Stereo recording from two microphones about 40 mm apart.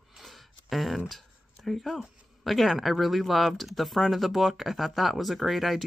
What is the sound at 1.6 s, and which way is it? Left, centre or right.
Speech, centre.